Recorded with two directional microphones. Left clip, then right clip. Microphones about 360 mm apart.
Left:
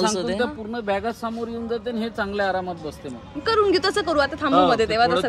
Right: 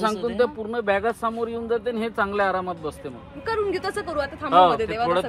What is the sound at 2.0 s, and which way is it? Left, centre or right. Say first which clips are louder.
Speech: right 2 dB; centre.